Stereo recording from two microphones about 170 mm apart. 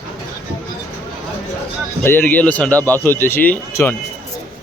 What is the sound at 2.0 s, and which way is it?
Speech, 10° left (ahead or behind).